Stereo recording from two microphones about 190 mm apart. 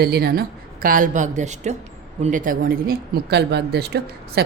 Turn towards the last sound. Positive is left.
turn(degrees=-60)  # may be behind; listen again after turning